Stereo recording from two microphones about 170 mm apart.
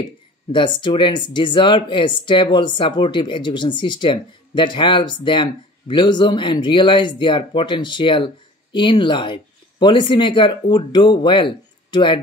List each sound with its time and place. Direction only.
0.5 s speech: 30° left (ahead or behind)